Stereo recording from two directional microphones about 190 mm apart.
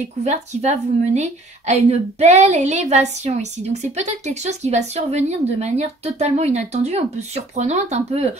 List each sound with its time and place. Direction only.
0.2 s speech: 35° right (ahead or behind)